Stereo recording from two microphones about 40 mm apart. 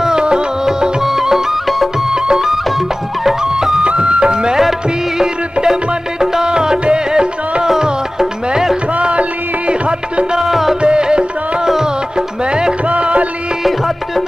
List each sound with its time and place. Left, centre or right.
0.0 s music: right
1.0 s music: centre
2.0 s music: centre
3.8 s music: right
8.9 s music: right
10.4 s music: centre
10.8 s music: right
12.8 s music: right
13.7 s music: centre